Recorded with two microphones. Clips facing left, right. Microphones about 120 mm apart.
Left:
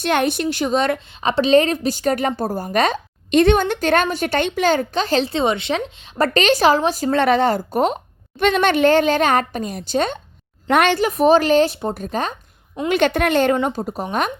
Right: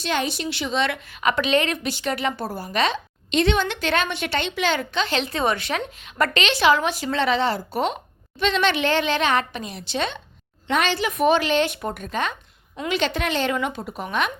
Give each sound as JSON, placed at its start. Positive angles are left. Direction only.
{"t": 0.0, "sound": "a woman's voice", "side_deg": 55}
{"t": 1.3, "sound": "a woman's voice", "side_deg": 35}
{"t": 10.7, "sound": "a woman's voice", "side_deg": 55}
{"t": 11.2, "sound": "speech", "side_deg": 40}
{"t": 12.9, "sound": "a woman's voice", "side_deg": 55}
{"t": 13.6, "sound": "speech", "side_deg": 35}